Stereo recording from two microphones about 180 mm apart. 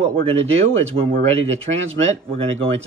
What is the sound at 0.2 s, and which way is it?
Speech, 35° right (ahead or behind).